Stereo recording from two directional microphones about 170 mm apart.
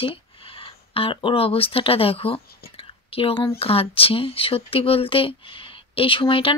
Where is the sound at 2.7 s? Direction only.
30° left (ahead or behind).